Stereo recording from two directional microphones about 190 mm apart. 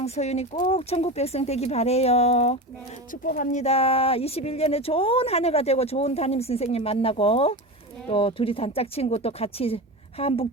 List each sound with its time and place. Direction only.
0.0 s speech: 35° left (ahead or behind)
3.1 s speech: 45° left (ahead or behind)